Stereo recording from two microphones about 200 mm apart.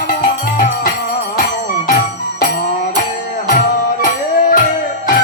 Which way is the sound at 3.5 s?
45° left (ahead or behind).